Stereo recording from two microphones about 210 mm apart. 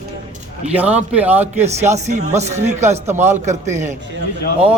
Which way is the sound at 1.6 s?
30° right (ahead or behind).